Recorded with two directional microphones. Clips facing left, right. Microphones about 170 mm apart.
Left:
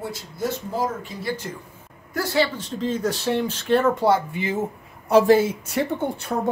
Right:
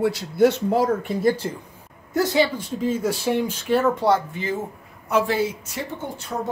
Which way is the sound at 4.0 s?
5° left (ahead or behind).